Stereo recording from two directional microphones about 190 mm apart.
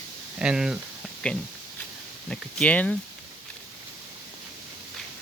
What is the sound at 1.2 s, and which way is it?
Speech, 5° left (ahead or behind).